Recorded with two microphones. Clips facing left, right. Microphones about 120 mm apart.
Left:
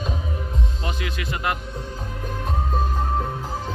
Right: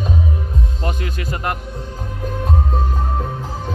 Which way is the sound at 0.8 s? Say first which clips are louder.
Right 5 dB; 40° right (ahead or behind).